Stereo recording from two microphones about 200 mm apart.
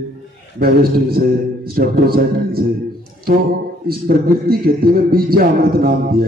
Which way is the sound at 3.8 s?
50° right (ahead or behind).